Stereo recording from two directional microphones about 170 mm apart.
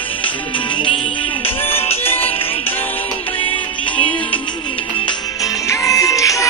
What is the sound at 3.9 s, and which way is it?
Music, 10° left (ahead or behind).